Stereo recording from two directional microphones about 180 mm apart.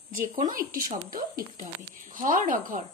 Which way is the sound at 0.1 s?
50° right (ahead or behind).